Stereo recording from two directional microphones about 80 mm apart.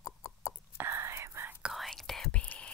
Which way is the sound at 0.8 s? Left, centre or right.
Right.